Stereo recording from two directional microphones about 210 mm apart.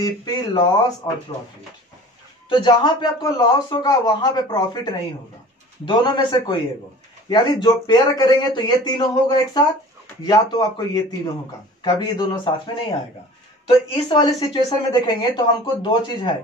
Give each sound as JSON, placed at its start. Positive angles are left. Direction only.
{"t": 0.0, "sound": "speech", "side_deg": 20}
{"t": 2.5, "sound": "speech", "side_deg": 20}
{"t": 7.6, "sound": "speech", "side_deg": 20}
{"t": 13.7, "sound": "speech", "side_deg": 25}